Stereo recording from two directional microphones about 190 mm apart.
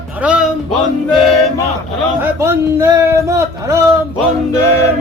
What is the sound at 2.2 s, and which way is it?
Music, 15° right (ahead or behind).